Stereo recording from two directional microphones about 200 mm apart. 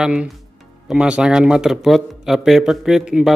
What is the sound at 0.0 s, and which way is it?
A man's voice, 5° right (ahead or behind).